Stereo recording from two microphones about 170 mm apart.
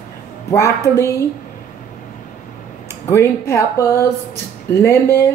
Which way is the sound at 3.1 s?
15° left (ahead or behind).